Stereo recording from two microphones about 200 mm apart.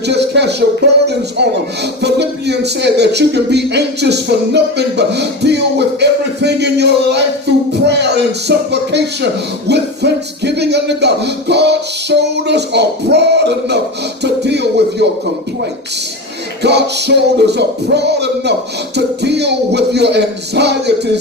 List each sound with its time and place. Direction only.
0.0 s a sound: 60° right (ahead or behind)
1.0 s speech: 55° right (ahead or behind)
7.7 s music: 55° right (ahead or behind)
16.6 s speech: 55° right (ahead or behind)